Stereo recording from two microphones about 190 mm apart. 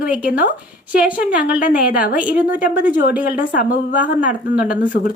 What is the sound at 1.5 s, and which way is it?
Speech, 45° left (ahead or behind).